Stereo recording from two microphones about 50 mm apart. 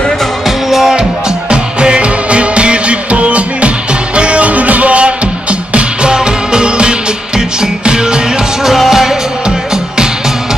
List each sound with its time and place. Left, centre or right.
0.7 s music: centre
1.5 s music: centre
8.6 s music: centre